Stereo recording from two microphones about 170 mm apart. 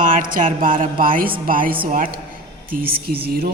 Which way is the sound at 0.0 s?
50° right (ahead or behind).